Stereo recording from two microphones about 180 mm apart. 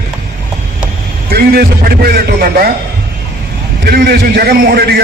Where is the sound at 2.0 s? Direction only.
55° right (ahead or behind).